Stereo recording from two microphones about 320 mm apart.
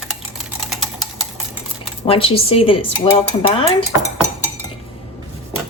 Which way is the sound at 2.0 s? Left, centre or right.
Centre.